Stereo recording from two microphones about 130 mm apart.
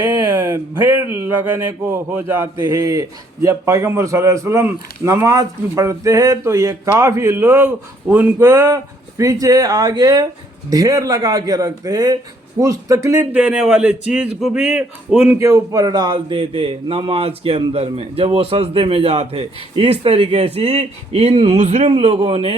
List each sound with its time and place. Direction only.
0.3 s a sound: 25° right (ahead or behind)
0.7 s a man's voice: 20° right (ahead or behind)
13.3 s a man's voice: 10° right (ahead or behind)
15.4 s speech: 25° right (ahead or behind); by 22.5 s 45° right (ahead or behind)